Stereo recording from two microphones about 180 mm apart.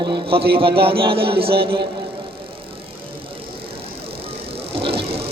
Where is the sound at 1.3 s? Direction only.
30° right (ahead or behind).